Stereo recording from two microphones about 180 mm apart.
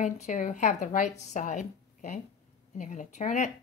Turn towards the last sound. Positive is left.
turn(degrees=40)  # may be behind; listen again after turning